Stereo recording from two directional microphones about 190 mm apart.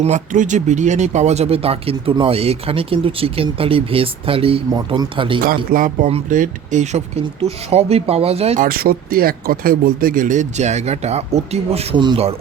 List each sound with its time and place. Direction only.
0.0 s speech: 40° right (ahead or behind)
5.7 s speech: 45° right (ahead or behind)
6.1 s speech: 30° right (ahead or behind)
6.3 s speech: 40° right (ahead or behind)
8.6 s speech: 50° right (ahead or behind); by 12.3 s 25° right (ahead or behind)